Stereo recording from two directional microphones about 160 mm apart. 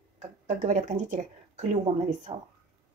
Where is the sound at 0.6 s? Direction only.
50° right (ahead or behind).